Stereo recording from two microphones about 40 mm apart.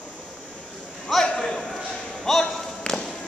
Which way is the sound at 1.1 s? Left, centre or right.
Centre.